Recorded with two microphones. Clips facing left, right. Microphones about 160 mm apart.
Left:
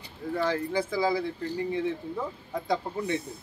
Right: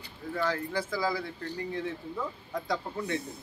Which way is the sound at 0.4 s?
20° left (ahead or behind).